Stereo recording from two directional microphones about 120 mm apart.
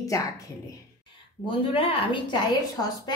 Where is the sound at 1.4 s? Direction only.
50° left (ahead or behind).